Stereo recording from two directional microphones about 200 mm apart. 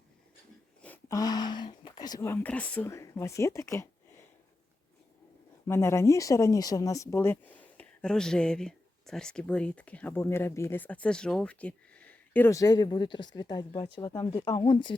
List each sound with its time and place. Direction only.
0.8 s speech: 10° left (ahead or behind)
5.6 s speech: 15° left (ahead or behind)